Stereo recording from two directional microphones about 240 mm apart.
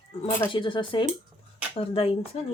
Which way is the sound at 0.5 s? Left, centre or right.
Centre.